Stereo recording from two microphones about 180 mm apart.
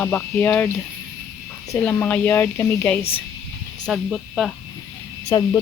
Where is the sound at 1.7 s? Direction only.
10° left (ahead or behind).